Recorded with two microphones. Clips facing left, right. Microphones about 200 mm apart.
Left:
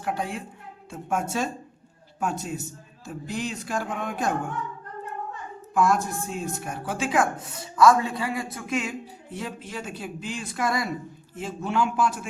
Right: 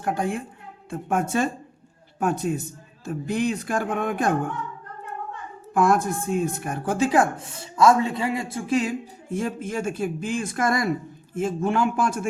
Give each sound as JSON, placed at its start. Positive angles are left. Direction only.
{"t": 0.0, "sound": "a man's voice", "side_deg": -50}
{"t": 5.7, "sound": "speech", "side_deg": -55}
{"t": 7.1, "sound": "speech", "side_deg": -30}